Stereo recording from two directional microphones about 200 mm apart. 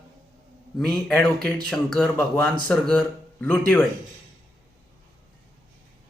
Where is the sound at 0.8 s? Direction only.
5° left (ahead or behind).